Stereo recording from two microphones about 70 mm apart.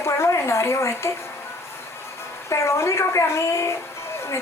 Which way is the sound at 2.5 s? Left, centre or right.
Left.